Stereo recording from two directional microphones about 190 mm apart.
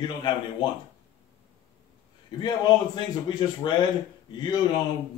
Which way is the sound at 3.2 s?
25° left (ahead or behind).